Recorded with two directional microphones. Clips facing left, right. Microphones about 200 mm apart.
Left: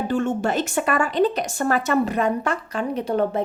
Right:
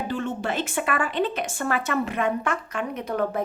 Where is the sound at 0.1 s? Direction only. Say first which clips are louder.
Left 7 dB; 45° left (ahead or behind).